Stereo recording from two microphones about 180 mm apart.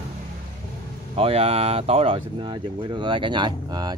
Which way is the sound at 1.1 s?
35° right (ahead or behind).